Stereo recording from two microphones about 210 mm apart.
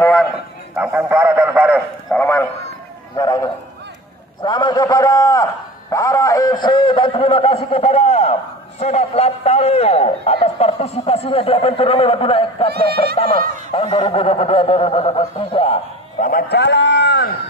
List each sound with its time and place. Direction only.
0.0 s a sound: centre (ahead or behind)
0.7 s speech: 5° right (ahead or behind)
2.1 s speech: 10° left (ahead or behind)
3.2 s a man's voice: 20° left (ahead or behind)
16.3 s speech: 45° left (ahead or behind)